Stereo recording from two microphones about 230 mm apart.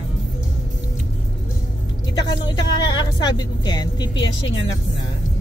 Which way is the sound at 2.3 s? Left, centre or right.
Centre.